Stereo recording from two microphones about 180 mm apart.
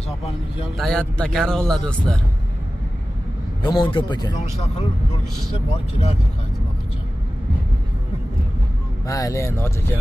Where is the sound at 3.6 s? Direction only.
25° left (ahead or behind).